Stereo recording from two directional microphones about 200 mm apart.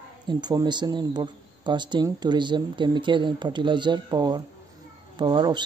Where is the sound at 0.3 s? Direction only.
20° right (ahead or behind).